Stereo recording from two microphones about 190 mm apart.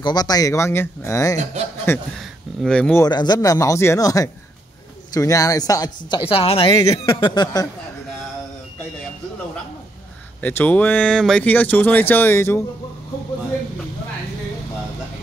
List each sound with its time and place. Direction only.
0.0 s speech: 20° left (ahead or behind)
1.4 s a man's voice: 35° right (ahead or behind)
2.1 s a sound: 5° left (ahead or behind)
3.0 s speech: 20° left (ahead or behind)
10.4 s speech: 10° left (ahead or behind)